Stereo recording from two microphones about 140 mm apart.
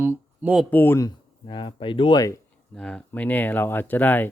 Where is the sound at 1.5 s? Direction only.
35° left (ahead or behind).